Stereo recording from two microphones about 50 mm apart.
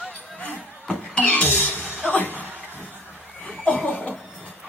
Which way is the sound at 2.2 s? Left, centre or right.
Right.